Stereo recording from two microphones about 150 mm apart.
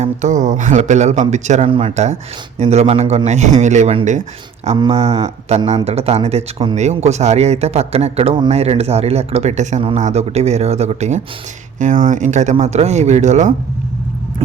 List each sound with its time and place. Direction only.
0.0 s speech: 50° right (ahead or behind)
4.8 s speech: 40° right (ahead or behind)